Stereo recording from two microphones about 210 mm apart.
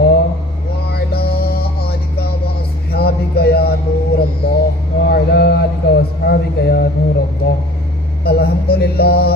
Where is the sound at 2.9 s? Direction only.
50° left (ahead or behind).